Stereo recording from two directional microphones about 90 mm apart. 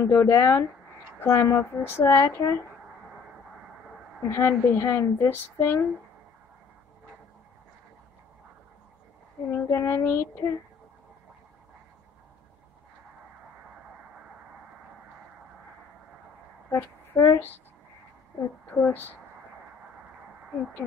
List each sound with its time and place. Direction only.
0.0 s speech: 30° left (ahead or behind)
4.3 s speech: 30° left (ahead or behind)
9.5 s speech: 30° left (ahead or behind)
16.7 s speech: 30° left (ahead or behind)
18.7 s speech: 20° left (ahead or behind)